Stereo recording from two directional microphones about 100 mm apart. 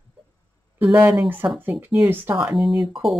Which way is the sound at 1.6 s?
20° right (ahead or behind).